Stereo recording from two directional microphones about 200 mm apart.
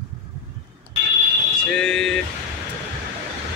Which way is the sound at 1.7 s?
5° left (ahead or behind).